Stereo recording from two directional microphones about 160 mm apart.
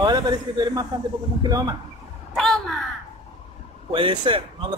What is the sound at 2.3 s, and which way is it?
Crow, centre (ahead or behind).